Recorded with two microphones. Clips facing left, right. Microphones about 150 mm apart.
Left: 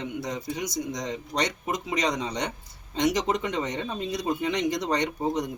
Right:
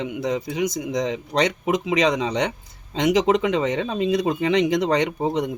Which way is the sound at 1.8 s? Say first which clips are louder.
Right 6 dB; 90° right.